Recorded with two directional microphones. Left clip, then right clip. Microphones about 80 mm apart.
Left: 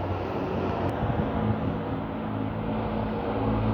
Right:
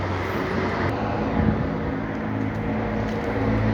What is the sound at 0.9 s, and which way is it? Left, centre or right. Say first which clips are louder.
Vehicle: right 4 dB; centre.